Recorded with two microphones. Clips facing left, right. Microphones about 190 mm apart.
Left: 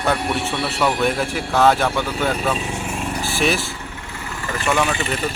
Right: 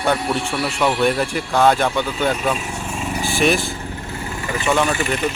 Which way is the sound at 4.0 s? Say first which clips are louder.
Right 4 dB; 30° right (ahead or behind).